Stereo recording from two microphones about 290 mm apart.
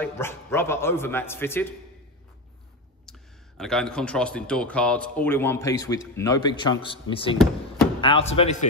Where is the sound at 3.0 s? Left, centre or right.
Centre.